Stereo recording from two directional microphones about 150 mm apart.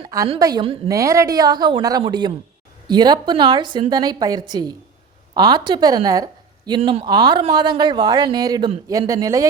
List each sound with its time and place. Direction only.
0.3 s speech: 25° right (ahead or behind)